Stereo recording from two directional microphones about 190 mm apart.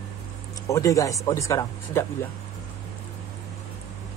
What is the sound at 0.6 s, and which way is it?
Speech, 15° left (ahead or behind).